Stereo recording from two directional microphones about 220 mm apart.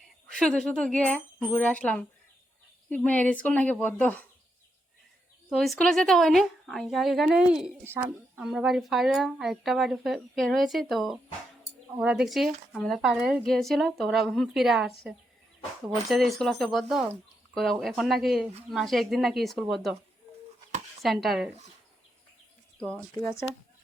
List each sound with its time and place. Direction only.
0.0 s speech: centre (ahead or behind)
5.5 s a woman's voice: centre (ahead or behind)
21.0 s a woman's voice: centre (ahead or behind)
22.8 s speech: 5° left (ahead or behind)